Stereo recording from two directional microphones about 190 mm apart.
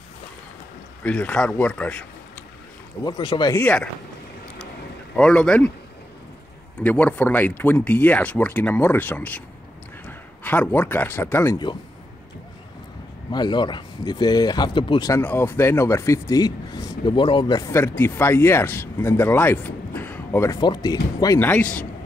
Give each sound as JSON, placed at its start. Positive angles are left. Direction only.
{"t": 1.0, "sound": "speech", "side_deg": 5}
{"t": 3.0, "sound": "speech", "side_deg": 20}
{"t": 3.5, "sound": "speech", "side_deg": 5}
{"t": 5.1, "sound": "speech", "side_deg": 5}
{"t": 6.8, "sound": "a man's voice", "side_deg": 10}
{"t": 13.3, "sound": "speech", "side_deg": 25}